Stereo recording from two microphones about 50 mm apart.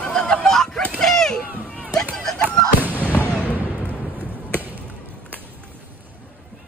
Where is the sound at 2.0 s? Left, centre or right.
Centre.